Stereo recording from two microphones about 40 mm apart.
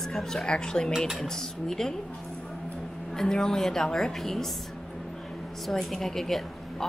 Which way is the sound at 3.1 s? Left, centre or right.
Centre.